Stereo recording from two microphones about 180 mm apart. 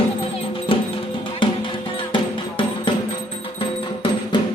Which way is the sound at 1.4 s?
25° left (ahead or behind).